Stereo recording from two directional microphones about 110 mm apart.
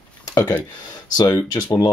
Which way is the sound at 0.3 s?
35° left (ahead or behind).